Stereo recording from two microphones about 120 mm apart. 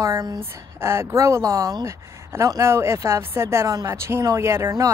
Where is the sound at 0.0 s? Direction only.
30° right (ahead or behind).